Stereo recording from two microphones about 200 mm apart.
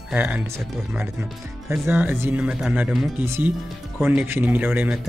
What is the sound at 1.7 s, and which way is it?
Speech, 10° right (ahead or behind).